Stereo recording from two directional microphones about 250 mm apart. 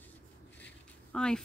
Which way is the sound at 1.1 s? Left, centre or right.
Centre.